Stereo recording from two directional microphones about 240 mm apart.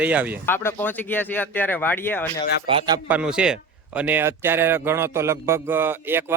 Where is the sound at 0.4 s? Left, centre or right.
Centre.